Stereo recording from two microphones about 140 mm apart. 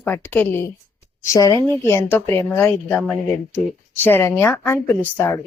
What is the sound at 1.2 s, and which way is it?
A woman's voice, 25° left (ahead or behind).